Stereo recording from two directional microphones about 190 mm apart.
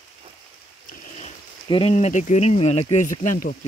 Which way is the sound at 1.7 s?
30° left (ahead or behind).